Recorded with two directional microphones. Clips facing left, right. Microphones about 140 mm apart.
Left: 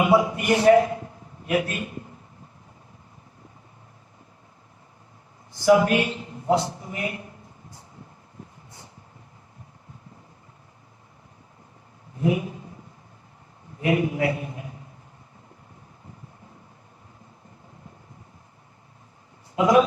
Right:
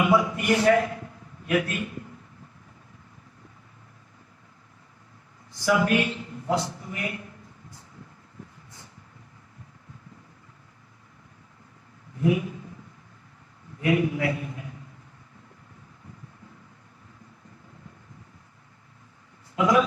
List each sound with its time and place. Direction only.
0.0 s a man's voice: 25° left (ahead or behind)
5.5 s a man's voice: 25° left (ahead or behind)
12.2 s a man's voice: 25° left (ahead or behind)
13.7 s a man's voice: 25° left (ahead or behind)
19.5 s a man's voice: 25° left (ahead or behind)